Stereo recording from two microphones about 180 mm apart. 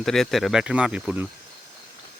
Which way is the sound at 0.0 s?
Centre (ahead or behind).